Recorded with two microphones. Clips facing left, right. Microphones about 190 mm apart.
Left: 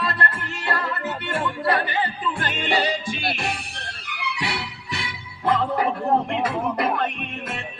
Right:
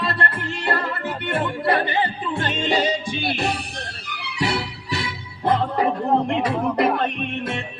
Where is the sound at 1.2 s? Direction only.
25° right (ahead or behind).